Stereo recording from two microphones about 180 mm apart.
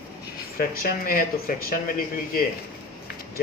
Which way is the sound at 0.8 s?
55° left (ahead or behind).